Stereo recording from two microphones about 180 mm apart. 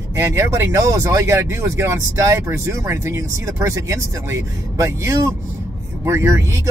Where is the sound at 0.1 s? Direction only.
15° right (ahead or behind).